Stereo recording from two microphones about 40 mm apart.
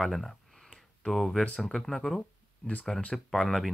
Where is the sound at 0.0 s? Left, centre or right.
Centre.